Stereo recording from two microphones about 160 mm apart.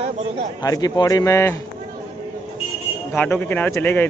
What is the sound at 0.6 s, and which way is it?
A man's voice, 25° left (ahead or behind).